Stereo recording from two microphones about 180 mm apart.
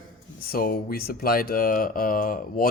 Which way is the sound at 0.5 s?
55° left (ahead or behind).